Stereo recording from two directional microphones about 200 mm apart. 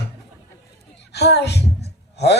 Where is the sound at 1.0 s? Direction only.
55° left (ahead or behind).